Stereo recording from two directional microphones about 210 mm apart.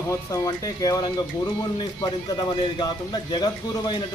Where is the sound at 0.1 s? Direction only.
15° left (ahead or behind).